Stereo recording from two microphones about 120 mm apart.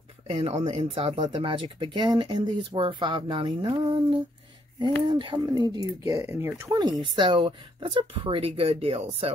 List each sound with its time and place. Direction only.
0.3 s speech: 55° right (ahead or behind); by 6.2 s 35° right (ahead or behind)
6.2 s speech: 20° right (ahead or behind)
6.8 s speech: 40° right (ahead or behind); by 9.3 s 60° right (ahead or behind)